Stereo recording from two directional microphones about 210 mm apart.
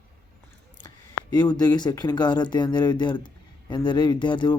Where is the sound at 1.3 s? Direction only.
20° left (ahead or behind).